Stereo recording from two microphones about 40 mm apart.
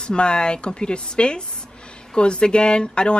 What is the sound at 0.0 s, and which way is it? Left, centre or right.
Speech, left.